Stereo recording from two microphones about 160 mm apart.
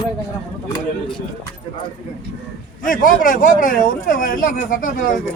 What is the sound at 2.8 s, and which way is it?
A man's voice, 60° left (ahead or behind).